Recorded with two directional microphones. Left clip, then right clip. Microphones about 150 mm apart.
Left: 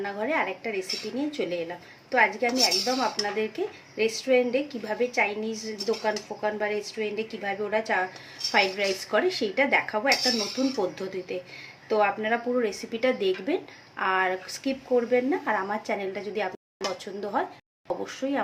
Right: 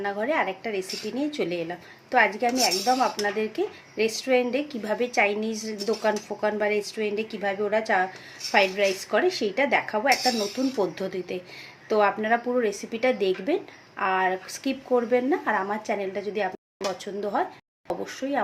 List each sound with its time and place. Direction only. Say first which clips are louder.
0.0 s a woman's voice: right 2 dB; 20° right (ahead or behind)
14.6 s a woman's voice: right 1 dB; 30° right (ahead or behind)
15.9 s speech: right 2 dB; 10° right (ahead or behind)
16.8 s a sound: right 2 dB; 10° right (ahead or behind)
17.4 s speech: right 1 dB; 15° right (ahead or behind)